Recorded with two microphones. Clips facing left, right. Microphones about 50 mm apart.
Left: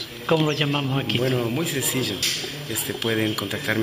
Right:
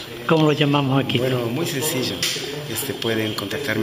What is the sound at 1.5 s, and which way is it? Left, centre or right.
Speech, centre.